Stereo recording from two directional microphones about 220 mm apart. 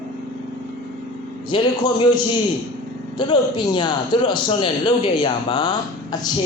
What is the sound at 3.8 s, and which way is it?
A man's voice, 20° left (ahead or behind).